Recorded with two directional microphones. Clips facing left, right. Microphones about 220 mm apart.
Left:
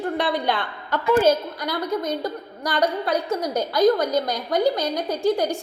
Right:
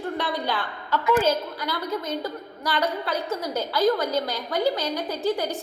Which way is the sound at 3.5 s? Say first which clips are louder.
Left 4 dB; 15° left (ahead or behind).